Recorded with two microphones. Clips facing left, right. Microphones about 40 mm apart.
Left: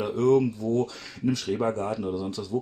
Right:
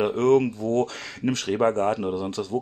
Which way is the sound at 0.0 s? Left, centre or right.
Right.